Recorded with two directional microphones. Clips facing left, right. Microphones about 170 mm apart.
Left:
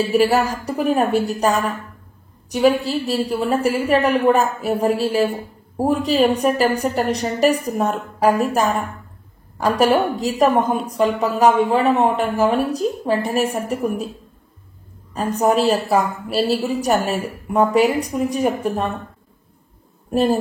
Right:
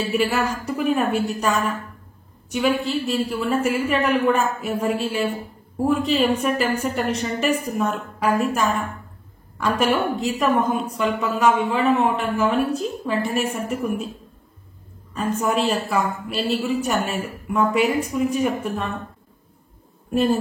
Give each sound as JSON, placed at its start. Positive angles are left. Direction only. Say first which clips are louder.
{"t": 0.1, "sound": "a woman's voice", "louder": "left 4 dB", "side_deg": 35}
{"t": 10.2, "sound": "a woman's voice", "louder": "left 3 dB", "side_deg": 35}
{"t": 15.1, "sound": "a woman's voice", "louder": "left 4 dB", "side_deg": 40}
{"t": 20.1, "sound": "speech", "louder": "left 2 dB", "side_deg": 35}